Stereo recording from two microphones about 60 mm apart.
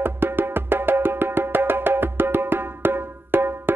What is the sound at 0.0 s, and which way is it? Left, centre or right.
Music, right.